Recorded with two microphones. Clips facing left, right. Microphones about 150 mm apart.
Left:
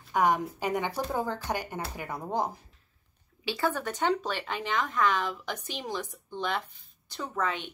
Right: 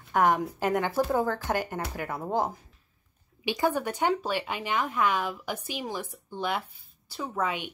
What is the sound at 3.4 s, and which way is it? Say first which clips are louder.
Speech: right 3 dB; 15° right (ahead or behind).